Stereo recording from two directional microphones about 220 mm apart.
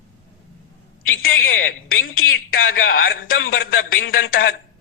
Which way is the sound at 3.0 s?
40° left (ahead or behind).